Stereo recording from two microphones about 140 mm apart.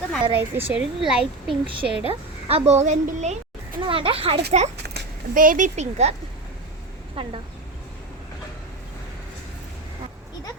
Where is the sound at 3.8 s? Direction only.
40° right (ahead or behind).